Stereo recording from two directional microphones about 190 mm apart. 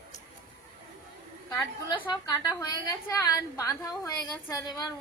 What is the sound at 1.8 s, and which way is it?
A woman's voice, 20° left (ahead or behind).